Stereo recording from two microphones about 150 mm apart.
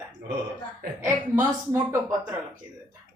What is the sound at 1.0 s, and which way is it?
A woman's voice, 20° right (ahead or behind).